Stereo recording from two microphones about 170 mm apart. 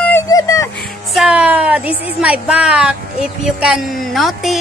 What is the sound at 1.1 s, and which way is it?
A woman's voice, 5° right (ahead or behind).